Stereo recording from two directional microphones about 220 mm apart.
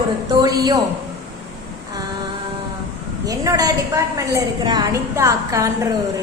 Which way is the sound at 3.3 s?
15° right (ahead or behind).